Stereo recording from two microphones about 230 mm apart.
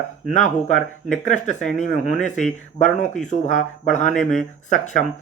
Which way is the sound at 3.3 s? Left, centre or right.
Left.